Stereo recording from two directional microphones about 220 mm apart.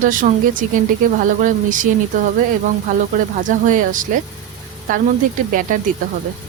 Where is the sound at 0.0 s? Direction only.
35° right (ahead or behind).